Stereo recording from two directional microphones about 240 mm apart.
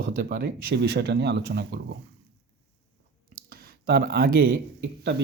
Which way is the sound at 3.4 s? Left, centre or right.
Right.